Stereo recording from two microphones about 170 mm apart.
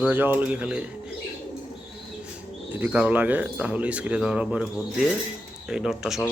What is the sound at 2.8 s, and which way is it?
A man's voice, 10° right (ahead or behind).